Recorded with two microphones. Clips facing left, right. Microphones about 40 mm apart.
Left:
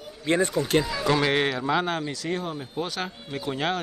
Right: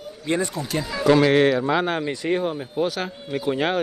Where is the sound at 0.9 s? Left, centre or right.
Centre.